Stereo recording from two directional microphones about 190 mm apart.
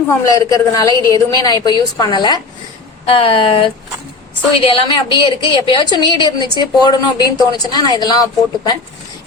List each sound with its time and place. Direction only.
0.1 s a woman's voice: 15° left (ahead or behind)